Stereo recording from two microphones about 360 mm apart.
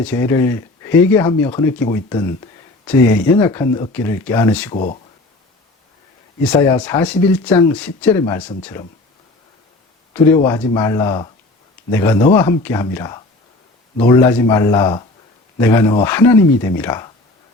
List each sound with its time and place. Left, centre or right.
0.0 s speech: centre
4.7 s speech: centre
6.4 s speech: centre
10.3 s speech: centre